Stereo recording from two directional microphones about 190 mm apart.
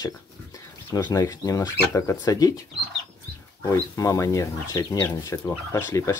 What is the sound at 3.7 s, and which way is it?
Speech, 15° left (ahead or behind).